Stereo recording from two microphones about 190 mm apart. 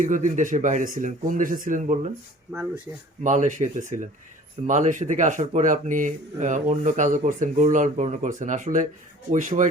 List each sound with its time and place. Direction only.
0.0 s speech: 40° right (ahead or behind)
3.2 s speech: 40° right (ahead or behind)